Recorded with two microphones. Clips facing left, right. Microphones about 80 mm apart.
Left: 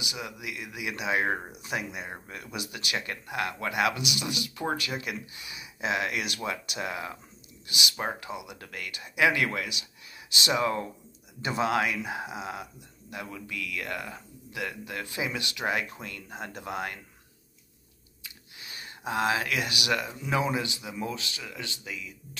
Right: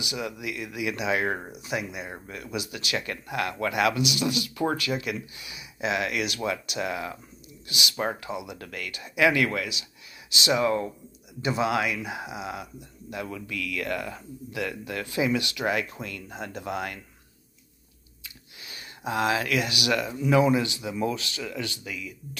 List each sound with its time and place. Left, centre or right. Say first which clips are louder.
0.1 s speech: right 5 dB; left
1.6 s speech: right 2 dB; left
13.1 s speech: right 4 dB; left
18.6 s speech: right 2 dB; left